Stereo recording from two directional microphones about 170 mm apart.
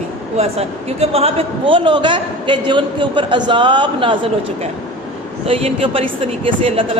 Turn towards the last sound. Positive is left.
turn(degrees=-35)  # may be behind; listen again after turning